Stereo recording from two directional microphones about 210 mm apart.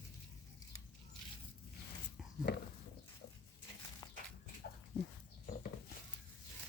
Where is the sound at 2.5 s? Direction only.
55° left (ahead or behind).